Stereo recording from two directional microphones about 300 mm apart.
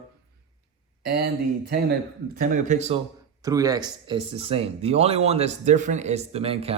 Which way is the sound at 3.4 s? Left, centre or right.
Centre.